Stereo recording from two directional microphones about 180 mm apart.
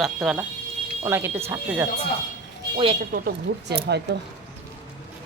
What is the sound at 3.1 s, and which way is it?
Speech, 55° right (ahead or behind).